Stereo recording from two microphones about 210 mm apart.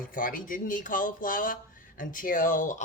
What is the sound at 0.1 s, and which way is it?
A man's voice, 40° left (ahead or behind).